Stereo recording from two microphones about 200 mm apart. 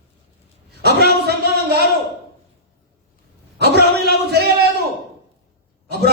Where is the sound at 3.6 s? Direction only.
55° right (ahead or behind).